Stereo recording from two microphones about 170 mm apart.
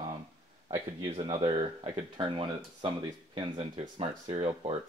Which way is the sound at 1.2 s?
35° right (ahead or behind).